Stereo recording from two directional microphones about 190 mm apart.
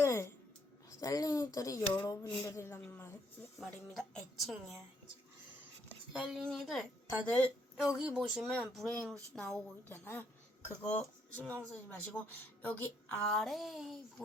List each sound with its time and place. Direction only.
0.0 s music: 15° left (ahead or behind)
0.9 s a woman's voice: 20° left (ahead or behind); by 4.8 s centre (ahead or behind)
6.1 s a woman's voice: 5° right (ahead or behind)
7.9 s a woman's voice: 5° right (ahead or behind)